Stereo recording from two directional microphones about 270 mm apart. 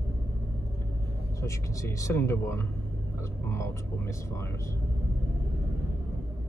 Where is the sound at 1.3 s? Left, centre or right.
Centre.